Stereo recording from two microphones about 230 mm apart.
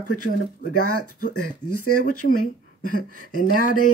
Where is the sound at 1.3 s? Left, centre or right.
Left.